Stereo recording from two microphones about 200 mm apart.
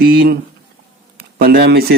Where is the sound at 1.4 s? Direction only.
50° right (ahead or behind).